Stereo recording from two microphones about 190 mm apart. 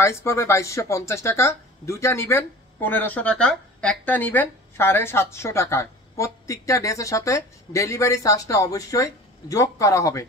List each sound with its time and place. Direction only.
0.0 s speech: 15° left (ahead or behind)